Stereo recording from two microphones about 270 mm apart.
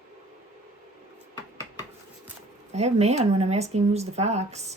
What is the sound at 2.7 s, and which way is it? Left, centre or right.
Speech, right.